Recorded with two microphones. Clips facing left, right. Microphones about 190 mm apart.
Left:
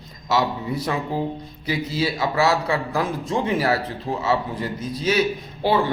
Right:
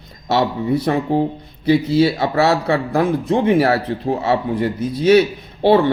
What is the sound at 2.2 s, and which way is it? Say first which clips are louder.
Speech: right 4 dB; 60° right (ahead or behind).